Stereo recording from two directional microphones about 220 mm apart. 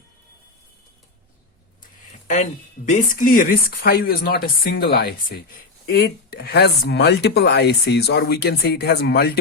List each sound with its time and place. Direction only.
2.2 s speech: 35° left (ahead or behind)